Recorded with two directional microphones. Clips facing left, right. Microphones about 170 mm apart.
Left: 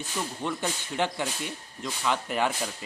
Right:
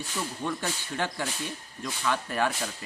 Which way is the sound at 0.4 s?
20° left (ahead or behind).